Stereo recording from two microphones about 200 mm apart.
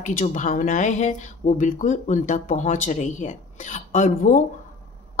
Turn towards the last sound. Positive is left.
turn(degrees=40)  # may be behind; listen again after turning